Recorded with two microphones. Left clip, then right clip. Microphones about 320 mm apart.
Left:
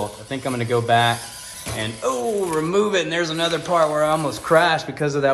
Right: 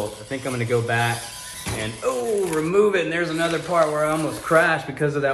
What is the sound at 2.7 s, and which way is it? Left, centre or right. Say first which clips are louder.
A man's voice: right 2 dB; left.